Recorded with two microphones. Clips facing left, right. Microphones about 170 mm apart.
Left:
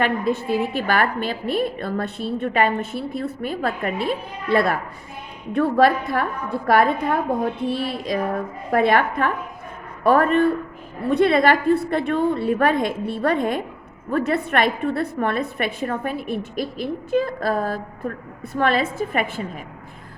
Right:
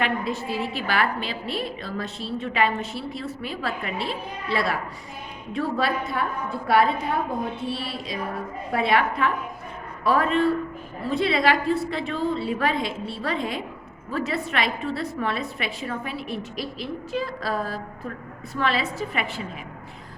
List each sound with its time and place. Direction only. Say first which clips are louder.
0.0 s a woman's voice: left 5 dB; 55° left (ahead or behind)